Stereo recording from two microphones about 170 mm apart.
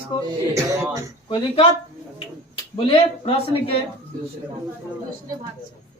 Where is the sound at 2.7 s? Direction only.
30° left (ahead or behind).